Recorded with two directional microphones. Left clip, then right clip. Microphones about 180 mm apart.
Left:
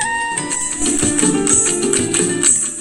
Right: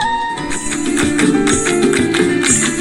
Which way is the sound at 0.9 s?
35° right (ahead or behind).